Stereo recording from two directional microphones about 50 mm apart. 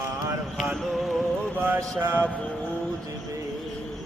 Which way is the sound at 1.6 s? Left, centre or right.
Right.